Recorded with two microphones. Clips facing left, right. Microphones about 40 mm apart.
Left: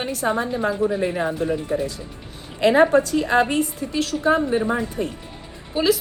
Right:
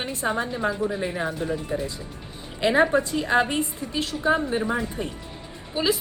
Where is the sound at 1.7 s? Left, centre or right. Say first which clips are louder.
Left 5 dB; left.